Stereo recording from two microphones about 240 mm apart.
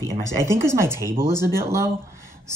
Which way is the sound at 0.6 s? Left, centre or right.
Centre.